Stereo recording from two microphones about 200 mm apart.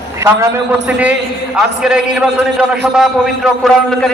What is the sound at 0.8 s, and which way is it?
A man's voice, 5° right (ahead or behind).